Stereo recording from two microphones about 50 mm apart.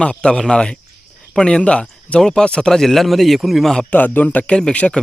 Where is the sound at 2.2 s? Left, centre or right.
Centre.